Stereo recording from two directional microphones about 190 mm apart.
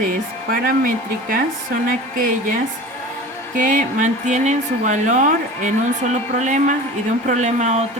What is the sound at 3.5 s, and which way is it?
Speech, 45° right (ahead or behind).